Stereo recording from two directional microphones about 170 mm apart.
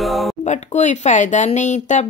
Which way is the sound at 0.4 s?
45° left (ahead or behind).